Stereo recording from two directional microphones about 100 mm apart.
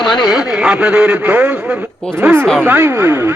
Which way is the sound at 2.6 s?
20° right (ahead or behind).